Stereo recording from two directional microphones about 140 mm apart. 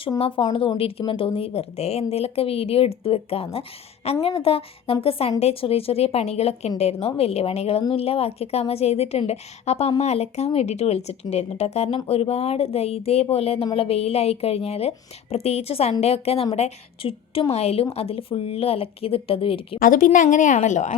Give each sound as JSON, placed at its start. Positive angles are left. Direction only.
{"t": 0.2, "sound": "a woman's voice", "side_deg": 40}
{"t": 19.8, "sound": "a woman's voice", "side_deg": 75}